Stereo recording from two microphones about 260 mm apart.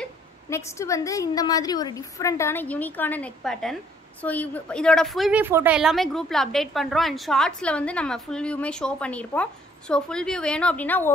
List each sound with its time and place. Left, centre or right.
0.5 s a woman's voice: centre